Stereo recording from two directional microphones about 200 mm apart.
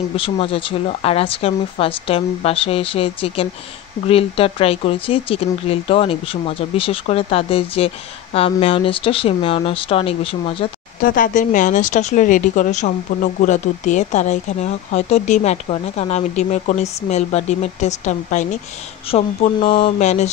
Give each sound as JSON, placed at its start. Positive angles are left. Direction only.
{"t": 0.1, "sound": "speech", "side_deg": 25}
{"t": 11.0, "sound": "speech", "side_deg": 45}